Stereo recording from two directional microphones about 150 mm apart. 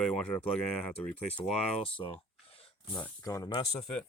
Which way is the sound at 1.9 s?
35° left (ahead or behind).